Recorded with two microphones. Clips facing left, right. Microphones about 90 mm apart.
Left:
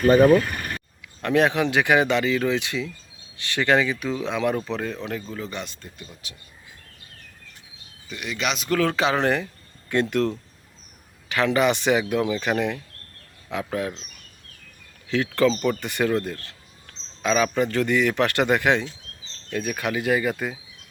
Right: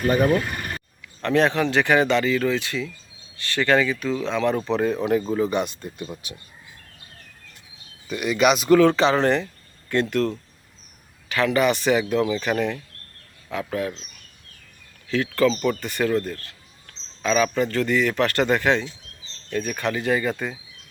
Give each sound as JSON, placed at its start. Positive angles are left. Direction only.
{"t": 0.1, "sound": "speech", "side_deg": 30}
{"t": 1.2, "sound": "a man's voice", "side_deg": 10}
{"t": 4.5, "sound": "speech", "side_deg": 0}
{"t": 8.0, "sound": "speech", "side_deg": -10}
{"t": 9.9, "sound": "a man's voice", "side_deg": 15}
{"t": 15.1, "sound": "a man's voice", "side_deg": 15}